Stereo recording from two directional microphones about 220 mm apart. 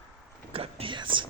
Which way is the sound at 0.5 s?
25° right (ahead or behind).